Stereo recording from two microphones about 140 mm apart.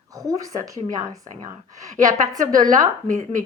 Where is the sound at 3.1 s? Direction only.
65° right (ahead or behind).